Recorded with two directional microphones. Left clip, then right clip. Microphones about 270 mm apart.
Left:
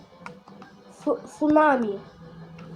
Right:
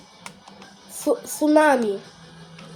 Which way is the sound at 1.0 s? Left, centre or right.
Right.